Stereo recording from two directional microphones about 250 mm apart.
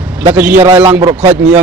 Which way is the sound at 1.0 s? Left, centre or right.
Centre.